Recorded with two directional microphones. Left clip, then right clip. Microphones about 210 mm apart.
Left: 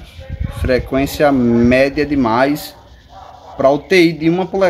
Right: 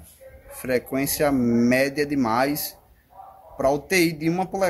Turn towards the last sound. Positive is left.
turn(degrees=0)  # may be behind; listen again after turning